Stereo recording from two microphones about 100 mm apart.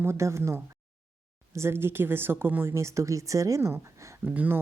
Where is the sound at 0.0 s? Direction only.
25° right (ahead or behind).